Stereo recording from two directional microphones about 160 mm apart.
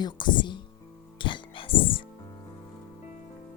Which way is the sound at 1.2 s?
30° left (ahead or behind).